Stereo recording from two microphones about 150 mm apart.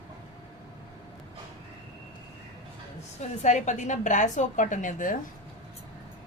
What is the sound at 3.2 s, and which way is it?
A woman's voice, 55° left (ahead or behind).